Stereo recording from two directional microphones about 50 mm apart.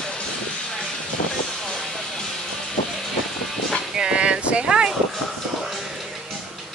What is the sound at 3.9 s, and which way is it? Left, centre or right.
Boat, centre.